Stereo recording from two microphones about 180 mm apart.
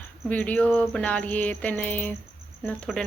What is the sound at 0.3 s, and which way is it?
Speech, 10° left (ahead or behind).